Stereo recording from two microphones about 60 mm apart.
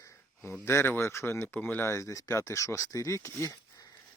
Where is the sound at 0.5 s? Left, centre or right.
Left.